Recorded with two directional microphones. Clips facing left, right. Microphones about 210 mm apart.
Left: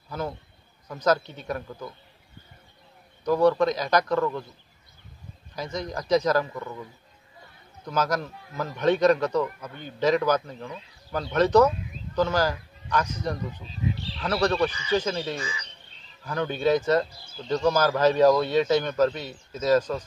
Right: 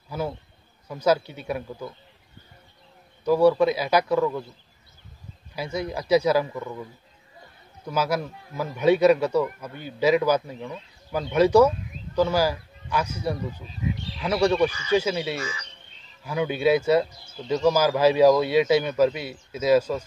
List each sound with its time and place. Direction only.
0.1 s speech: 10° right (ahead or behind)
3.3 s speech: 10° right (ahead or behind)
5.6 s speech: 10° right (ahead or behind)
7.8 s speech: 10° right (ahead or behind)
13.7 s speech: 30° left (ahead or behind)
14.1 s speech: 10° right (ahead or behind)